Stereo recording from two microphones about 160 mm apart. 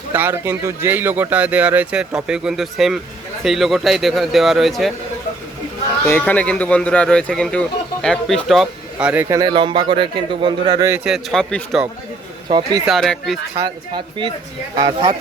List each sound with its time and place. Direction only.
0.1 s a man's voice: 15° right (ahead or behind)
6.1 s speech: 10° left (ahead or behind); by 9.2 s 5° right (ahead or behind)
9.3 s a man's voice: 25° right (ahead or behind)
11.0 s a man's voice: centre (ahead or behind)
12.5 s a man's voice: 30° right (ahead or behind)
12.8 s a man's voice: centre (ahead or behind)
13.9 s a man's voice: 30° right (ahead or behind)